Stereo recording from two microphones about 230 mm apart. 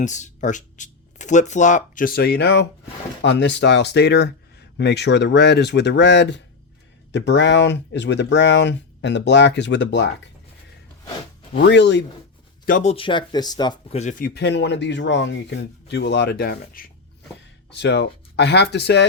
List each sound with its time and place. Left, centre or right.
0.0 s speech: left
11.6 s speech: left
12.6 s speech: left